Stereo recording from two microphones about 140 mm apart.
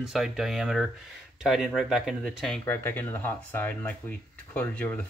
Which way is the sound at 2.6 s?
15° left (ahead or behind).